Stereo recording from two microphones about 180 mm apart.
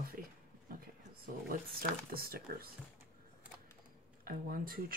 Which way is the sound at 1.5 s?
55° right (ahead or behind).